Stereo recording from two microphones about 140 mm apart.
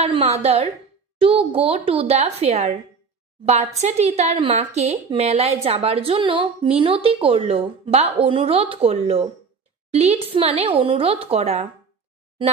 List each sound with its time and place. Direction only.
0.0 s a woman's voice: 50° right (ahead or behind)
3.8 s a woman's voice: 50° right (ahead or behind)